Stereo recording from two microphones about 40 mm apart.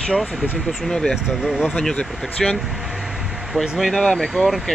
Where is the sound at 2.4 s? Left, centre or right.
Centre.